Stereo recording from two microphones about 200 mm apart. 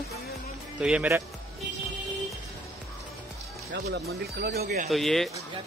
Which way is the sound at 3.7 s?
55° right (ahead or behind).